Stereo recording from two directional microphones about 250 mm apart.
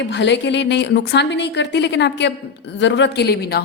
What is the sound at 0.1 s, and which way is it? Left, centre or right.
A woman's voice, left.